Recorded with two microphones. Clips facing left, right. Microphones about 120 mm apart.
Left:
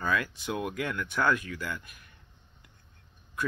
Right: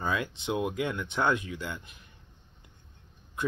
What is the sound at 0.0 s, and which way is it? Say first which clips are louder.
Speech: left 1 dB; 20° right (ahead or behind).